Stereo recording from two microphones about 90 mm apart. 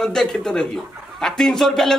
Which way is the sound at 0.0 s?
5° left (ahead or behind).